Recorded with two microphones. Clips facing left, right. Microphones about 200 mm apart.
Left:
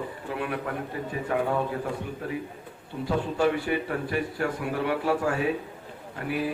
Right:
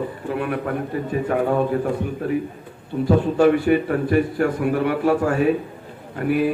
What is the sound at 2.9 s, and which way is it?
A man's voice, 55° right (ahead or behind).